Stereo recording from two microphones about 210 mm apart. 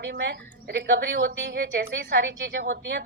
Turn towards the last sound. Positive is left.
turn(degrees=-50)  # may be behind; listen again after turning